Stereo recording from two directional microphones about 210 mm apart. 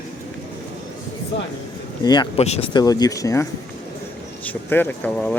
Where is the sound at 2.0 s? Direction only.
20° left (ahead or behind).